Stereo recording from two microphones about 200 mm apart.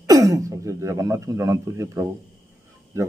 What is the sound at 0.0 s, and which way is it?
A man's voice, 15° right (ahead or behind).